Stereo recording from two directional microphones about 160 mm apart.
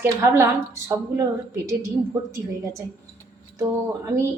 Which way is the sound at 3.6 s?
15° right (ahead or behind).